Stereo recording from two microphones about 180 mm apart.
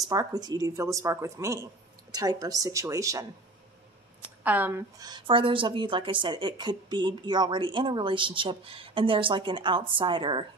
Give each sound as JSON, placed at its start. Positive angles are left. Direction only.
{"t": 0.0, "sound": "a woman's voice", "side_deg": -20}
{"t": 4.4, "sound": "a woman's voice", "side_deg": -10}